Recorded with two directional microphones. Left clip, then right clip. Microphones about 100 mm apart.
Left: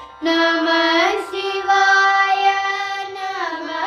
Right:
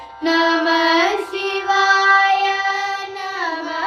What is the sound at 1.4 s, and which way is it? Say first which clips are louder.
Music: even; 25° right (ahead or behind).